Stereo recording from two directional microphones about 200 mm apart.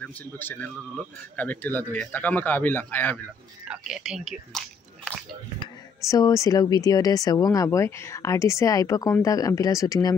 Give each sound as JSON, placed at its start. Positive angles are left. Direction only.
{"t": 0.0, "sound": "speech", "side_deg": 10}
{"t": 3.6, "sound": "speech", "side_deg": -5}
{"t": 6.0, "sound": "speech", "side_deg": 15}